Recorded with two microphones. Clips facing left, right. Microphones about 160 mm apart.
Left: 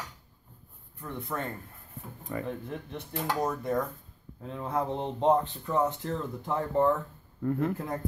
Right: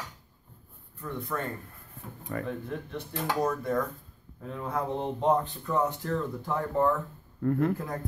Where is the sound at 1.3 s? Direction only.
25° left (ahead or behind).